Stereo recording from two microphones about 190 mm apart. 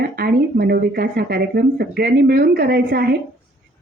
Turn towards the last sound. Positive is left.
turn(degrees=-55)  # may be behind; listen again after turning